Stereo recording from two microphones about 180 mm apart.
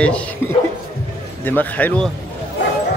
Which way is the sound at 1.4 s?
10° left (ahead or behind).